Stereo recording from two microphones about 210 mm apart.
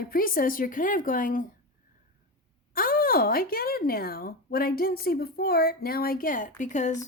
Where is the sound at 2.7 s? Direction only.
45° left (ahead or behind).